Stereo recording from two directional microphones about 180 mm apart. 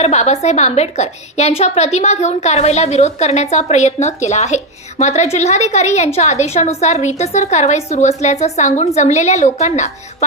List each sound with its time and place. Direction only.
0.0 s a woman's voice: 40° left (ahead or behind)